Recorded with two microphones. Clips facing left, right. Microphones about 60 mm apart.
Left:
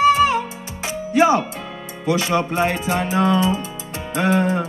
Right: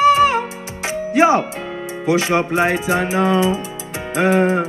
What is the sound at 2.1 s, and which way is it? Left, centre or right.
Speech, right.